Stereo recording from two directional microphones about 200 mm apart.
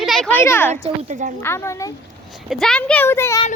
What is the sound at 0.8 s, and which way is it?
Speech, 40° right (ahead or behind).